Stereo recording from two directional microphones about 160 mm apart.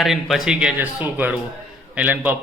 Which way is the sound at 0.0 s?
Centre (ahead or behind).